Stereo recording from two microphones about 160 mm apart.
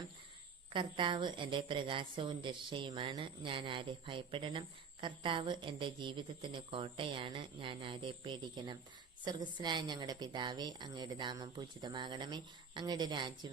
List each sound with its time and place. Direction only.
0.7 s a woman's voice: 30° right (ahead or behind)